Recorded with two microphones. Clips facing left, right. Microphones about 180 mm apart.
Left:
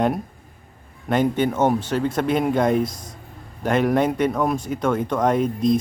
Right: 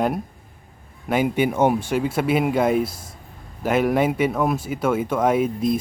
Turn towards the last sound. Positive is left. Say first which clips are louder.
# left 1 dB
turn(degrees=-5)  # may be behind; listen again after turning